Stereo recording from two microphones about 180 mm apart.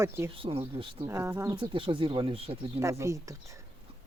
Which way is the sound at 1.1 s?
15° right (ahead or behind).